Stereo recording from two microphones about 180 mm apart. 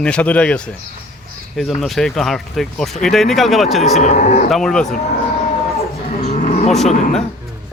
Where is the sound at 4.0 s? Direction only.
40° left (ahead or behind).